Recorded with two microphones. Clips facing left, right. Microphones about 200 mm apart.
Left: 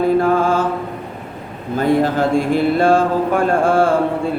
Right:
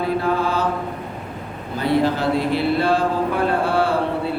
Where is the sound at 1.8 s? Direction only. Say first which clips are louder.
Left 3 dB; 45° left (ahead or behind).